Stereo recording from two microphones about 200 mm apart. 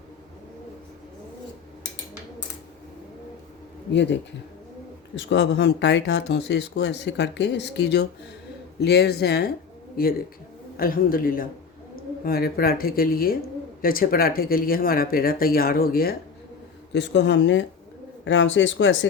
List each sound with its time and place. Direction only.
3.9 s speech: 60° left (ahead or behind)
16.9 s speech: 60° left (ahead or behind)